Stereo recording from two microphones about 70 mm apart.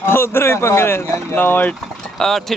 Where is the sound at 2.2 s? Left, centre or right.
Centre.